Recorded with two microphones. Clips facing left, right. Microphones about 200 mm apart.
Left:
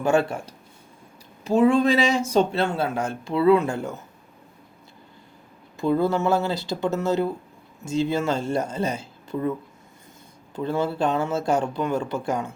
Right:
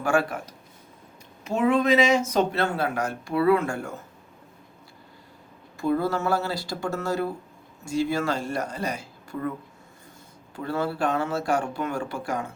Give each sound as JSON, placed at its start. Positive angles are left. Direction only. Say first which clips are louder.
{"t": 0.0, "sound": "speech", "louder": "left 3 dB", "side_deg": 25}
{"t": 5.7, "sound": "speech", "louder": "left 3 dB", "side_deg": 20}
{"t": 10.5, "sound": "speech", "louder": "left 3 dB", "side_deg": 20}